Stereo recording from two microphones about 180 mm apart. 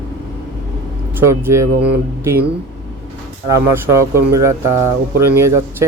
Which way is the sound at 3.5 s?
15° right (ahead or behind).